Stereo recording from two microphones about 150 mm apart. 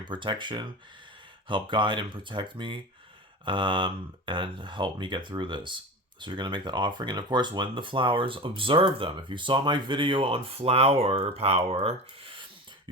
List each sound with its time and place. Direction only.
0.0 s speech: 30° right (ahead or behind)